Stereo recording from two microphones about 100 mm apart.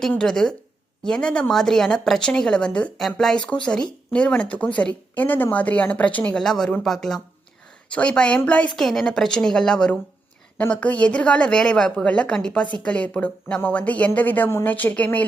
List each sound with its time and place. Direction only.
0.2 s speech: 5° left (ahead or behind)